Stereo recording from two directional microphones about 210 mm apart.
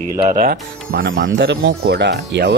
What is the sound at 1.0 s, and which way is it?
Speech, 65° right (ahead or behind).